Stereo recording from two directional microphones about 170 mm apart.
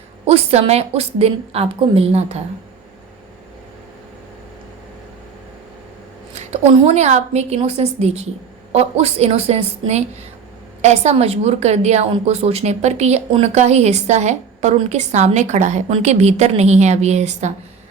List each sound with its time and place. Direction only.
0.3 s a woman's voice: 35° right (ahead or behind)
6.3 s a woman's voice: 40° right (ahead or behind)